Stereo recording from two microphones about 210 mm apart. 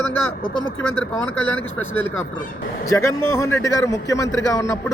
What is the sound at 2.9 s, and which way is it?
A man's voice, 15° left (ahead or behind).